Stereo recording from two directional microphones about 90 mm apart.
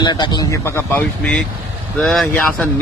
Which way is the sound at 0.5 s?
30° left (ahead or behind).